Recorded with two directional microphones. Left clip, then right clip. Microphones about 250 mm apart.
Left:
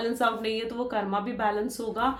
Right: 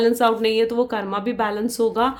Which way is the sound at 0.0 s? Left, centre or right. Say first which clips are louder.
Right 9 dB; right.